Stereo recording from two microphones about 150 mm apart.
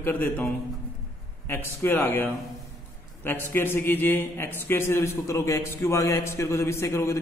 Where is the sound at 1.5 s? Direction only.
15° left (ahead or behind).